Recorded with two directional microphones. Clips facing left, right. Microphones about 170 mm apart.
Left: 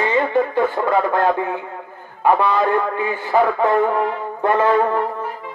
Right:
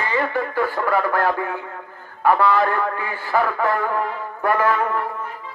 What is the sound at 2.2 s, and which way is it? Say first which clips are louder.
A man's voice: left 1 dB; 20° left (ahead or behind).